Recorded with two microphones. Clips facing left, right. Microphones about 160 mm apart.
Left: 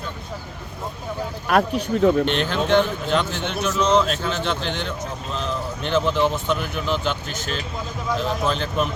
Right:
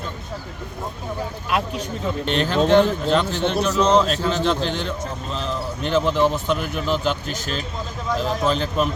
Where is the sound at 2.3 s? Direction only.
Centre (ahead or behind).